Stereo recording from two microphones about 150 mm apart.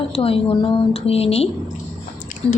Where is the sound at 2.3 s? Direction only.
60° left (ahead or behind).